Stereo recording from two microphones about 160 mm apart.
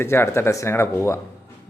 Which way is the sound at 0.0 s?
15° left (ahead or behind).